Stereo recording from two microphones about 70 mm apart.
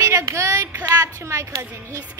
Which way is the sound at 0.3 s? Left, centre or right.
Right.